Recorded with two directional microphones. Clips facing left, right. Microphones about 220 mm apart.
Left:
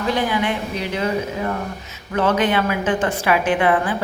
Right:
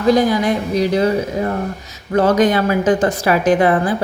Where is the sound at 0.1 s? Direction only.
40° right (ahead or behind).